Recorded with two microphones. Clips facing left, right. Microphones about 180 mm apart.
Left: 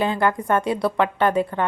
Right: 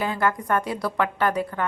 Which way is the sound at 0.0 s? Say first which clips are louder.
Left 3 dB; 25° left (ahead or behind).